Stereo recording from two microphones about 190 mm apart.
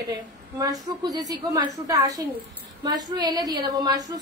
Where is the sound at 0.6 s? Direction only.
20° right (ahead or behind).